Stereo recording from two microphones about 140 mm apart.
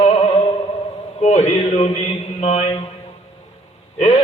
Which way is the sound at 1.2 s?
55° left (ahead or behind).